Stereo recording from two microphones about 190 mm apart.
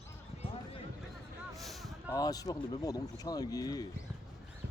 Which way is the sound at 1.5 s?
Centre (ahead or behind).